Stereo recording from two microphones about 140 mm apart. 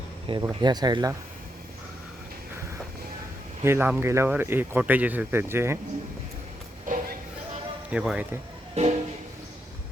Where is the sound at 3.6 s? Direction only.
15° right (ahead or behind).